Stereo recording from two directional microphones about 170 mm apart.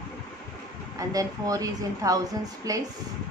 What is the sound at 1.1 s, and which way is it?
A woman's voice, 20° right (ahead or behind).